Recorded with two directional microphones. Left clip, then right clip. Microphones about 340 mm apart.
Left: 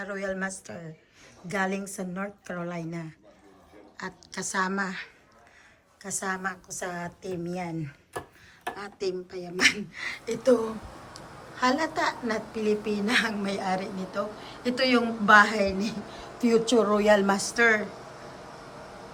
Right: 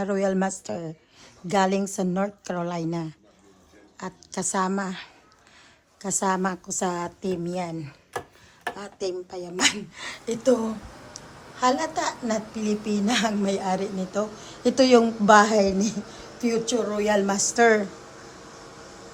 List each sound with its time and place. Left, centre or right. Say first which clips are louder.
0.0 s a woman's voice: right 7 dB; centre
16.4 s a woman's voice: left 2 dB; centre